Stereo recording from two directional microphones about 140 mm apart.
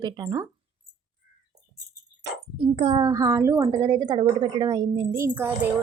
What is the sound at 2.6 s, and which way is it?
Speech, 40° right (ahead or behind).